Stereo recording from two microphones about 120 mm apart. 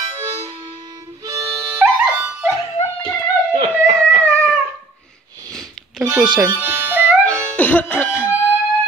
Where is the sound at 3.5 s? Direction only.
55° right (ahead or behind).